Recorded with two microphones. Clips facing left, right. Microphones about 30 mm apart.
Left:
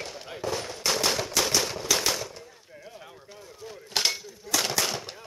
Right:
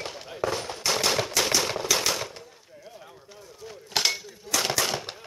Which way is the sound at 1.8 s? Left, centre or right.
Centre.